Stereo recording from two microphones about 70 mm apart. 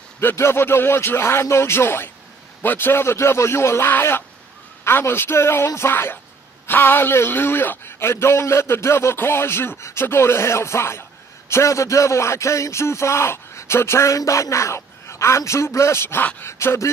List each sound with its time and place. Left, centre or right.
0.2 s a man's voice: left